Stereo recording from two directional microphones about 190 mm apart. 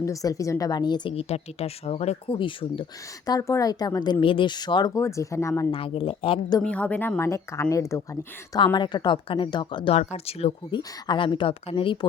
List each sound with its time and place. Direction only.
0.0 s speech: 15° left (ahead or behind)
3.2 s speech: 15° left (ahead or behind)
5.7 s speech: 30° left (ahead or behind)
6.6 s speech: 5° left (ahead or behind); by 11.9 s 30° left (ahead or behind)